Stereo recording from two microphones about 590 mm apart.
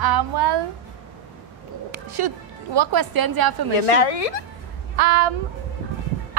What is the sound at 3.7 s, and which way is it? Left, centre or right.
Speech, left.